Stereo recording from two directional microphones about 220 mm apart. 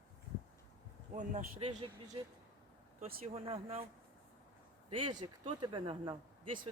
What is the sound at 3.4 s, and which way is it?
Speech, 25° right (ahead or behind).